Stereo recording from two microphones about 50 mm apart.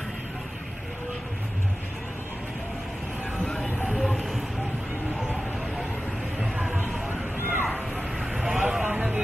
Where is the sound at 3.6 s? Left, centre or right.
Left.